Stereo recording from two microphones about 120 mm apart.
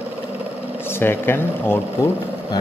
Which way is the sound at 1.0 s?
20° left (ahead or behind).